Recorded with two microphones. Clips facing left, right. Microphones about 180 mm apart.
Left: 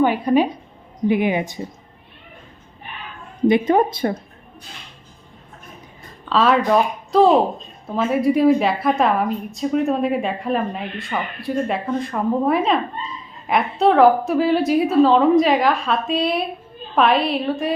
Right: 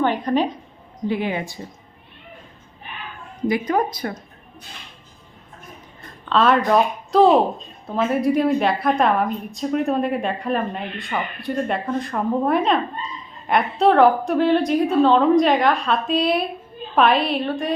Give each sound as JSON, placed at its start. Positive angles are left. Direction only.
{"t": 0.0, "sound": "a woman's voice", "side_deg": 10}
{"t": 3.4, "sound": "speech", "side_deg": 25}
{"t": 6.2, "sound": "a woman's voice", "side_deg": 0}